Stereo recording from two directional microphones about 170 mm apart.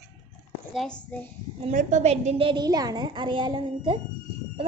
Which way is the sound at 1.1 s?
10° left (ahead or behind).